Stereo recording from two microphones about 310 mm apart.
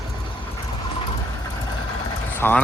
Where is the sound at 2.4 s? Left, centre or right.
Centre.